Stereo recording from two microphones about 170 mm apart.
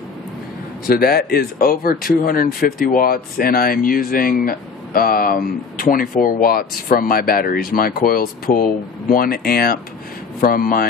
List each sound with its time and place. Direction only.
0.8 s speech: 60° left (ahead or behind)